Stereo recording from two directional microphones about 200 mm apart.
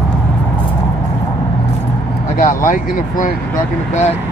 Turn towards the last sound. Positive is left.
turn(degrees=40)  # may be behind; listen again after turning